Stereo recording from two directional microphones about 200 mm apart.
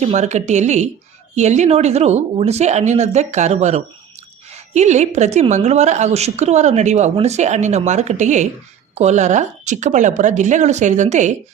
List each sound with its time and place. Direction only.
0.0 s a woman's voice: 35° right (ahead or behind)